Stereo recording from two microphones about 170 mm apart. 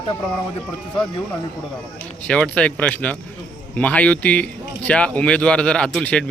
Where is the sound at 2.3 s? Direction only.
5° left (ahead or behind).